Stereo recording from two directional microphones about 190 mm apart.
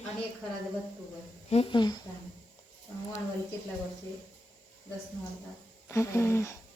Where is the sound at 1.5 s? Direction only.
30° left (ahead or behind).